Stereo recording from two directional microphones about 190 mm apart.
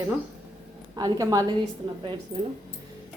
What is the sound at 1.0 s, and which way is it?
Speech, 20° right (ahead or behind).